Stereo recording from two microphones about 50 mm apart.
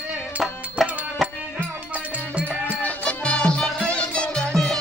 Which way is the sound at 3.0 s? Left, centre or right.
Left.